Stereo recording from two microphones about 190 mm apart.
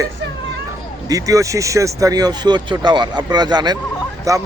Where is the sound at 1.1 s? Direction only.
20° right (ahead or behind).